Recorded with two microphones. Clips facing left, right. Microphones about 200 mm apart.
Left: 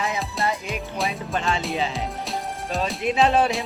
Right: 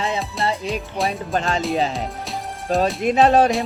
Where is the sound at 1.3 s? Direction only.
40° right (ahead or behind).